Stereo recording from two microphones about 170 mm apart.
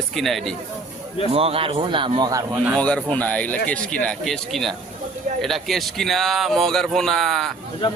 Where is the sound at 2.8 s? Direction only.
5° left (ahead or behind).